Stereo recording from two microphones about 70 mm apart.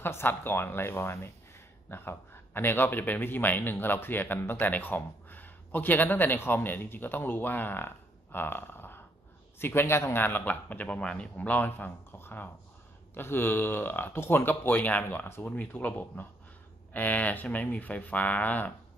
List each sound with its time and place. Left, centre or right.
0.0 s speech: left